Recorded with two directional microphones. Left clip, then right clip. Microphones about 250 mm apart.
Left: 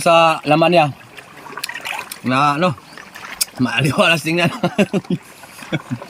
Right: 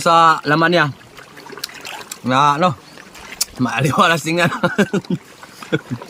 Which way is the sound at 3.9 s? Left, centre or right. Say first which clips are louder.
Right 1 dB; right.